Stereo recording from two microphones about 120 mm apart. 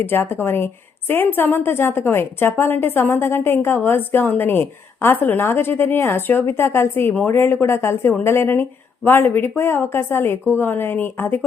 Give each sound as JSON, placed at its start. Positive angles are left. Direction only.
{"t": 0.0, "sound": "a woman's voice", "side_deg": 20}